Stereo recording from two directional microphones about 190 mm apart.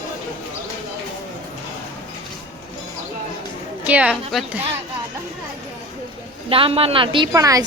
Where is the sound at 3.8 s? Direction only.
5° right (ahead or behind).